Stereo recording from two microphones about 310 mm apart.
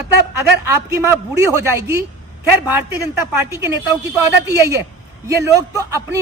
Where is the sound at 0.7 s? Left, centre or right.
Centre.